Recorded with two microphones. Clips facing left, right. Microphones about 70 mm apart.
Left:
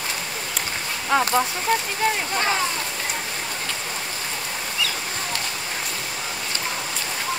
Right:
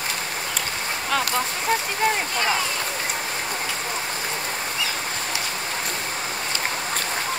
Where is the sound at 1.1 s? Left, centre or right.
Left.